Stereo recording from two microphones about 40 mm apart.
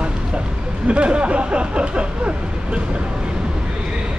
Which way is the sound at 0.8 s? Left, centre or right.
Right.